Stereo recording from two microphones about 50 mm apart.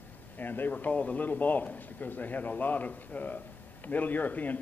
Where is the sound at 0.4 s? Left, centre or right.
Left.